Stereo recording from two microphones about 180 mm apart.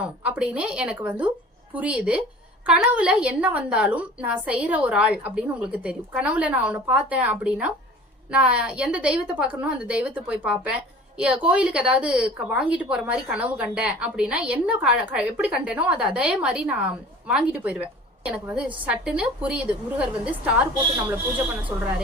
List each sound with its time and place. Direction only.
0.0 s a woman's voice: 5° right (ahead or behind)
21.7 s a woman's voice: 15° right (ahead or behind)